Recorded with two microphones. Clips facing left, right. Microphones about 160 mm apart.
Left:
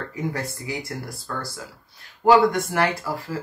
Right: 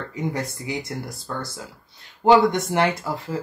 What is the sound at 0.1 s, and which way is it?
Speech, 20° right (ahead or behind).